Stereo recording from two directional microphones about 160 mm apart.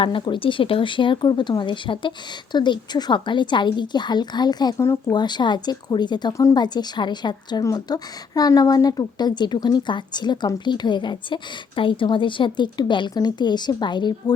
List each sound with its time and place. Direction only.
0.0 s speech: 30° left (ahead or behind)
5.1 s speech: 25° left (ahead or behind)